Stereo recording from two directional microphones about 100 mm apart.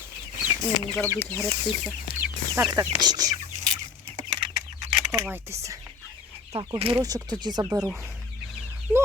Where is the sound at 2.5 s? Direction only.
35° right (ahead or behind).